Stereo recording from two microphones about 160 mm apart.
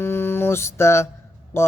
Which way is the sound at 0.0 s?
15° left (ahead or behind).